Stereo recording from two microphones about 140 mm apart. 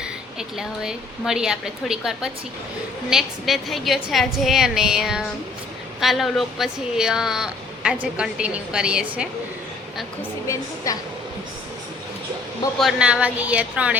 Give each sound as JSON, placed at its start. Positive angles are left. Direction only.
{"t": 0.0, "sound": "speech", "side_deg": -5}
{"t": 10.4, "sound": "a woman's voice", "side_deg": 25}
{"t": 12.8, "sound": "speech", "side_deg": -5}